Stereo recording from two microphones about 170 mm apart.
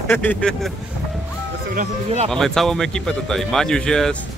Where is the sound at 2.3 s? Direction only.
Centre (ahead or behind).